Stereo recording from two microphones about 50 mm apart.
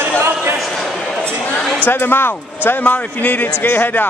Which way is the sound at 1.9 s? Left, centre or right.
Left.